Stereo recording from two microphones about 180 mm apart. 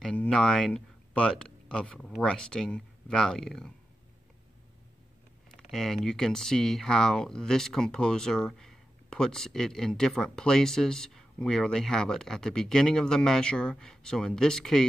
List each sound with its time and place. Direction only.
0.0 s speech: 5° left (ahead or behind)
5.7 s speech: centre (ahead or behind)